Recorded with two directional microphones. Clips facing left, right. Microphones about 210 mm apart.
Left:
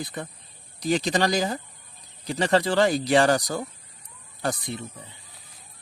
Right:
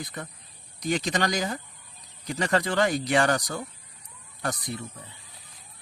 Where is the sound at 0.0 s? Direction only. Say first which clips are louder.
Left 3 dB; 30° left (ahead or behind).